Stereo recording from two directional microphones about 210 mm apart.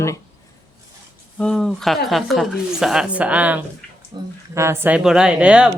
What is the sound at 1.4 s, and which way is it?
Speech, centre (ahead or behind).